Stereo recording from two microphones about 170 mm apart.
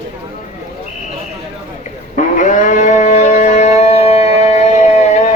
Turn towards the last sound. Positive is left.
turn(degrees=40)  # may be behind; listen again after turning